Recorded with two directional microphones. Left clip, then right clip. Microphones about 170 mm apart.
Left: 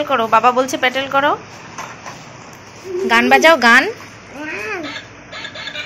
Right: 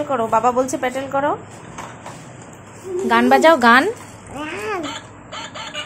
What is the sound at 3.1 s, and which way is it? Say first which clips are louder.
Speech: left 2 dB; 25° right (ahead or behind).